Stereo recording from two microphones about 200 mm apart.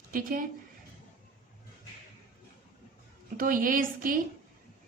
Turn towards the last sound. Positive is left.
turn(degrees=-45)  # may be behind; listen again after turning